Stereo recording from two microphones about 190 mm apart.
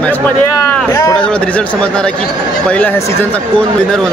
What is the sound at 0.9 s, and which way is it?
Speech, 20° left (ahead or behind).